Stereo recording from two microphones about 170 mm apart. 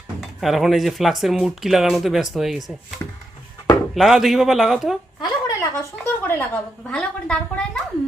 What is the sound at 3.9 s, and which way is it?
Speech, centre (ahead or behind).